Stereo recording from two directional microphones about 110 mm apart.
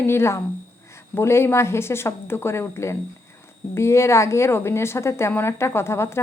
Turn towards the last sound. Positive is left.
turn(degrees=25)  # may be behind; listen again after turning